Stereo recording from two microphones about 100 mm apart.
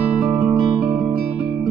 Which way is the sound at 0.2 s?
15° right (ahead or behind).